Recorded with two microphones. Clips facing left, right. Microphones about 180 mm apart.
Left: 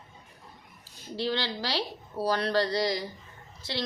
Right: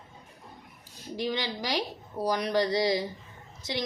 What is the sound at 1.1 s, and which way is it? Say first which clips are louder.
A woman's voice: left 1 dB; 15° right (ahead or behind).